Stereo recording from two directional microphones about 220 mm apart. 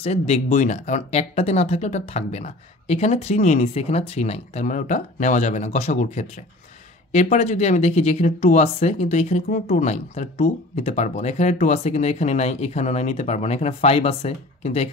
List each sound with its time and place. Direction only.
0.0 s speech: 30° left (ahead or behind)